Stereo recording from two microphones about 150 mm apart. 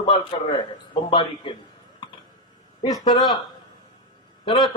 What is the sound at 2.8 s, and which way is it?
Speech, 25° left (ahead or behind).